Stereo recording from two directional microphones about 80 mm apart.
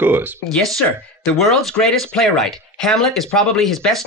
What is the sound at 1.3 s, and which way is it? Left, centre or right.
Speech, centre.